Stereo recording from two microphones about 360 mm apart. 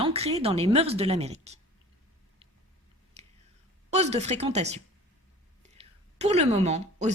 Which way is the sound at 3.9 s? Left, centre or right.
Centre.